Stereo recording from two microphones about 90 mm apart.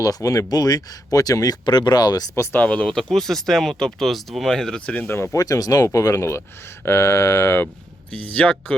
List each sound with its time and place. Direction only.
0.0 s speech: 40° left (ahead or behind)
2.3 s speech: 30° left (ahead or behind)
2.6 s speech: 15° left (ahead or behind)
5.0 s speech: 25° left (ahead or behind)
5.4 s speech: 40° left (ahead or behind)
8.1 s speech: 15° left (ahead or behind)